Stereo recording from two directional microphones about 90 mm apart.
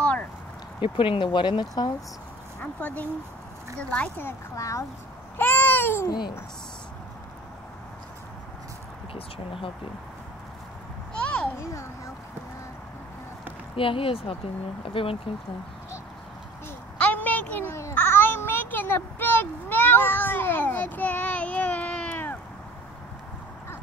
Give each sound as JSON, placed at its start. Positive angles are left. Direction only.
{"t": 0.7, "sound": "speech", "side_deg": 70}
{"t": 2.6, "sound": "speech", "side_deg": 15}
{"t": 4.6, "sound": "speech", "side_deg": 35}
{"t": 5.4, "sound": "babbling", "side_deg": 20}
{"t": 9.1, "sound": "speech", "side_deg": 90}
{"t": 11.1, "sound": "a sound", "side_deg": 15}
{"t": 11.5, "sound": "a sound", "side_deg": 30}
{"t": 13.7, "sound": "speech", "side_deg": 85}
{"t": 17.0, "sound": "a sound", "side_deg": 20}